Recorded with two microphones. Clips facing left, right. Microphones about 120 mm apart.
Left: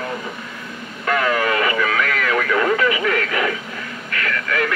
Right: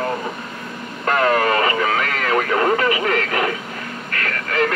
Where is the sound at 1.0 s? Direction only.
40° right (ahead or behind).